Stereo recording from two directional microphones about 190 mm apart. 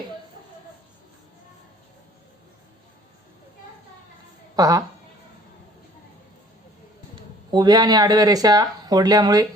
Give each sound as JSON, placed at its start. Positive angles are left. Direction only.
{"t": 4.5, "sound": "speech", "side_deg": -20}
{"t": 7.2, "sound": "speech", "side_deg": -20}